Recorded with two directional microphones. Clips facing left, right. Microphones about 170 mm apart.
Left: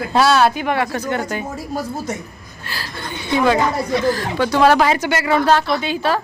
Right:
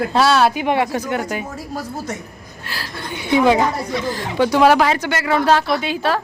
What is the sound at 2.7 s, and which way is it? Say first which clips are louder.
Speech: even; centre (ahead or behind).